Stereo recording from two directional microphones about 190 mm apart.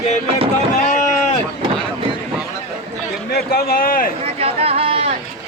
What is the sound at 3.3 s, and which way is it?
Speech, 55° left (ahead or behind).